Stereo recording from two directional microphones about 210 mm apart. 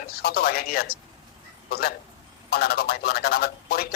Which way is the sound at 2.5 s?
50° left (ahead or behind).